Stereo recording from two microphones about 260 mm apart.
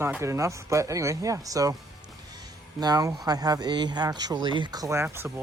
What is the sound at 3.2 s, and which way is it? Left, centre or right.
Speech, centre.